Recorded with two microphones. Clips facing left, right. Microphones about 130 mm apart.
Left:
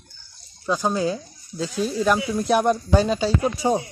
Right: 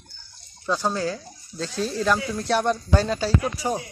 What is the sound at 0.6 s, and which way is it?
Speech, 10° left (ahead or behind).